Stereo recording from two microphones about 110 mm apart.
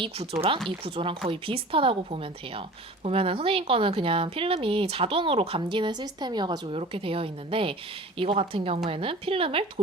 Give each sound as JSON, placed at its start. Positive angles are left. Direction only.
{"t": 0.9, "sound": "a woman's voice", "side_deg": -55}
{"t": 6.7, "sound": "a woman's voice", "side_deg": -55}